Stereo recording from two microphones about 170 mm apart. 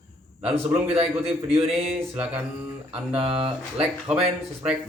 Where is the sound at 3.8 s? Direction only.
5° right (ahead or behind).